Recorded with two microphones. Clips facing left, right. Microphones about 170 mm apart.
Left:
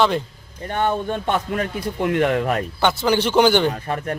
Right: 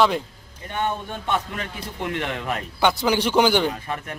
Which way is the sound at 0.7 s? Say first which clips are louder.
Left 5 dB; 50° left (ahead or behind).